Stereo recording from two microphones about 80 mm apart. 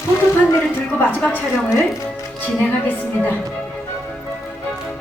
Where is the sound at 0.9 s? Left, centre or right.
Left.